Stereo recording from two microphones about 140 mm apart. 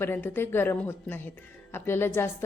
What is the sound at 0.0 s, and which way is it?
A woman's voice, 15° left (ahead or behind).